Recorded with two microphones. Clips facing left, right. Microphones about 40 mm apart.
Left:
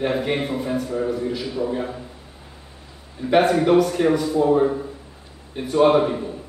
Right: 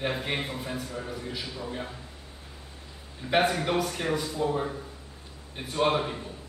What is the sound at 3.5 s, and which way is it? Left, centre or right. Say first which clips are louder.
A man's voice: left 11 dB; centre.